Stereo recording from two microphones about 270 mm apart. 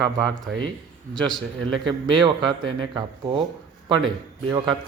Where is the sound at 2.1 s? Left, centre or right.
Centre.